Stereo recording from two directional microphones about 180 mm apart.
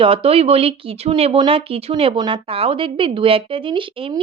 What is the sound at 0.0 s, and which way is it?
Speech, 30° right (ahead or behind).